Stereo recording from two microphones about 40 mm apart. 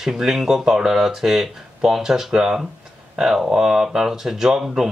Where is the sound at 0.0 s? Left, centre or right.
Centre.